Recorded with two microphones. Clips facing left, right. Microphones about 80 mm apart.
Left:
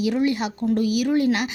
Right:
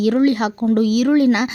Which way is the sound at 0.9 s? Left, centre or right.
Right.